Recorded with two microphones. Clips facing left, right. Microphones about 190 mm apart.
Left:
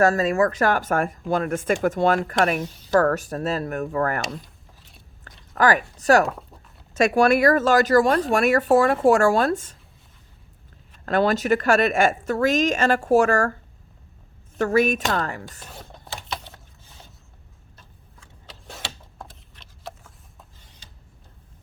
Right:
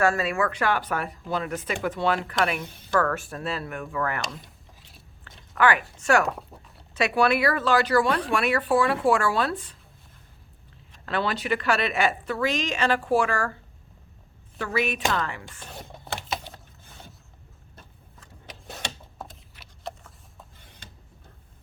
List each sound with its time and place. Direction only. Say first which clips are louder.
0.0 s speech: left 5 dB; 40° left (ahead or behind)
5.5 s speech: left 3 dB; 40° left (ahead or behind)
11.0 s speech: left 7 dB; 45° left (ahead or behind)
14.6 s speech: left 7 dB; 45° left (ahead or behind)
19.2 s a sound: right 1 dB; 5° right (ahead or behind)
20.6 s a sound: right 3 dB; 55° right (ahead or behind)